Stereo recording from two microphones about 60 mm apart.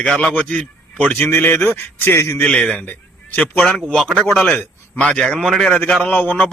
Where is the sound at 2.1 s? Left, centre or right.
Left.